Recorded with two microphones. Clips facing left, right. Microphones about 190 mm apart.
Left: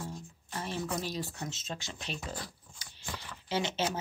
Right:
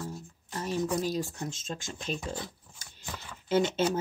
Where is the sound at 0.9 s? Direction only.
40° right (ahead or behind).